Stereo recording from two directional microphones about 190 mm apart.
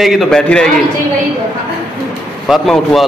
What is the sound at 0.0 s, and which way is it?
Speech, centre (ahead or behind).